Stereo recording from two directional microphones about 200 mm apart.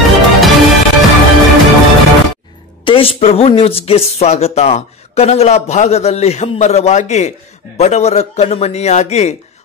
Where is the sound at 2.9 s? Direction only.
25° left (ahead or behind).